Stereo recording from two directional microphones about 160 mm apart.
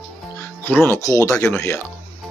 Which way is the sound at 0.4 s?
15° left (ahead or behind).